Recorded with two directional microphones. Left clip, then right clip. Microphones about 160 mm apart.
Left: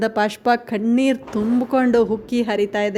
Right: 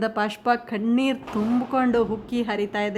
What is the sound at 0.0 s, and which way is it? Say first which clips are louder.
A woman's voice: left 5 dB; 25° left (ahead or behind).